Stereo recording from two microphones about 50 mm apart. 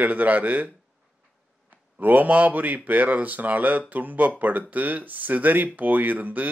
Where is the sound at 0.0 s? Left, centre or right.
Right.